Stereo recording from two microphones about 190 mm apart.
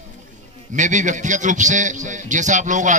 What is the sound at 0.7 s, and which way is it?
A man's voice, 40° right (ahead or behind).